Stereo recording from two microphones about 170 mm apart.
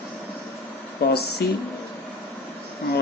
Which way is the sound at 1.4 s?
70° left (ahead or behind).